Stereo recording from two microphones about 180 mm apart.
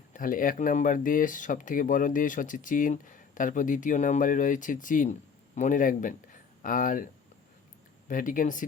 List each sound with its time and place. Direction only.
0.1 s speech: 50° left (ahead or behind)